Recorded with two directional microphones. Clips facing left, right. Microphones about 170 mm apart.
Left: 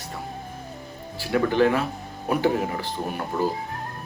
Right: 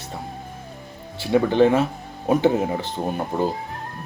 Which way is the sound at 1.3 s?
20° right (ahead or behind).